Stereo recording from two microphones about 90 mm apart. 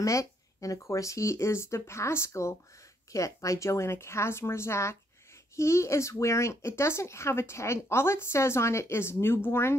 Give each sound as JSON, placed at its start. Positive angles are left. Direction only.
{"t": 0.0, "sound": "speech", "side_deg": 35}